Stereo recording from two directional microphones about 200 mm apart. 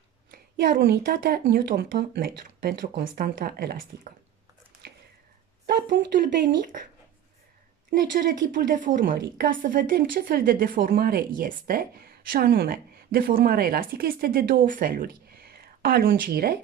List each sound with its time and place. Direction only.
0.3 s a woman's voice: 55° right (ahead or behind)
5.7 s speech: 50° right (ahead or behind)
8.7 s a woman's voice: 45° right (ahead or behind)